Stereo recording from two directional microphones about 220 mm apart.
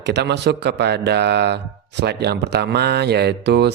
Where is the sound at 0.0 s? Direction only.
50° right (ahead or behind).